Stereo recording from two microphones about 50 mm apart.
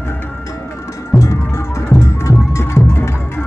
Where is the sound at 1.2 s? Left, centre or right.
Left.